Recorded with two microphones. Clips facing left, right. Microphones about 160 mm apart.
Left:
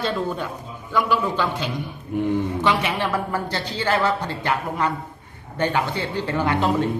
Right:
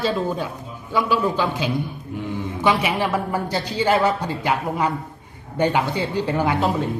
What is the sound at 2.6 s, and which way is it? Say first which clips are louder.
Speech: right 2 dB; 10° right (ahead or behind).